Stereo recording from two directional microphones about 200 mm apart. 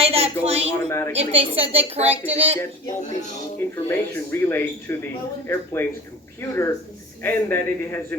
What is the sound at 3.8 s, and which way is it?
Speech, 10° left (ahead or behind).